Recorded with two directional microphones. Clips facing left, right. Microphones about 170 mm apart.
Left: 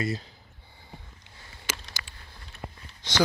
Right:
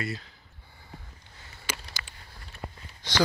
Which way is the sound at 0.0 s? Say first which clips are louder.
Left 4 dB; 40° left (ahead or behind).